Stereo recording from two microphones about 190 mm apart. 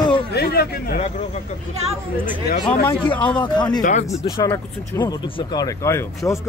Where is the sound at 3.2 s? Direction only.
25° left (ahead or behind).